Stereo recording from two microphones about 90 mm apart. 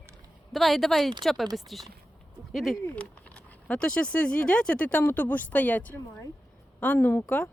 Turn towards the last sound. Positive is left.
turn(degrees=20)  # may be behind; listen again after turning